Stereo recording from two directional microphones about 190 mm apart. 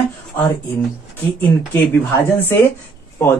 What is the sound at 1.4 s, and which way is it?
Speech, 10° left (ahead or behind).